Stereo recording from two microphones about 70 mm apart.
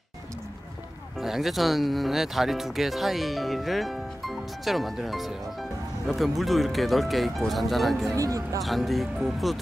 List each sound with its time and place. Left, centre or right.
1.2 s speech: centre
8.2 s speech: right
8.6 s speech: centre